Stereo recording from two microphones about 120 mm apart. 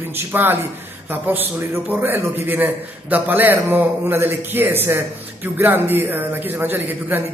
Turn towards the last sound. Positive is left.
turn(degrees=-15)  # may be behind; listen again after turning